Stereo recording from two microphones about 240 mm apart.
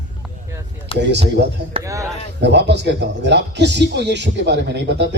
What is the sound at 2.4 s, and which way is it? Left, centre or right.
Speech, right.